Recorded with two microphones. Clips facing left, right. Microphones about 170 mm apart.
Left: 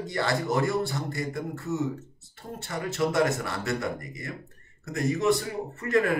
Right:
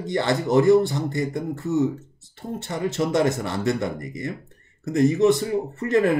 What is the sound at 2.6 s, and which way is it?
Speech, 20° right (ahead or behind).